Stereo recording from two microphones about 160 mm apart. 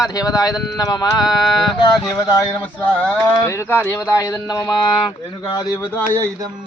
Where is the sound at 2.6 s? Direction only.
10° left (ahead or behind).